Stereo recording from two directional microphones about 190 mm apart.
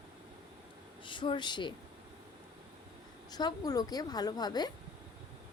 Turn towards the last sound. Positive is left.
turn(degrees=20)  # may be behind; listen again after turning